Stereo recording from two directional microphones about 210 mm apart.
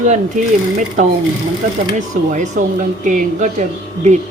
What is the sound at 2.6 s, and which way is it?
Speech, 40° right (ahead or behind).